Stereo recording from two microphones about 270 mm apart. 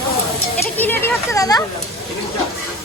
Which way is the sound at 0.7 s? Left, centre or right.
Centre.